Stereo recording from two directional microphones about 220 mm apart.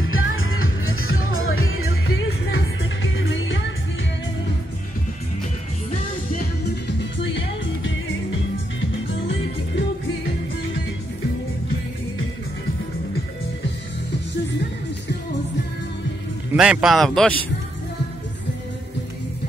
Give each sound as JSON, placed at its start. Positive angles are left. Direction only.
{"t": 0.0, "sound": "music", "side_deg": 70}
{"t": 2.2, "sound": "music", "side_deg": 55}
{"t": 7.0, "sound": "music", "side_deg": 55}
{"t": 16.5, "sound": "a man's voice", "side_deg": -5}